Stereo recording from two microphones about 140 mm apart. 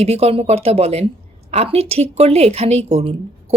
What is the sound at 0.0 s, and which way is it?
A woman's voice, 50° right (ahead or behind).